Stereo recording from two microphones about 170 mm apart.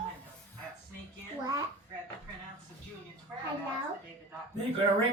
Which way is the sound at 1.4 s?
20° right (ahead or behind).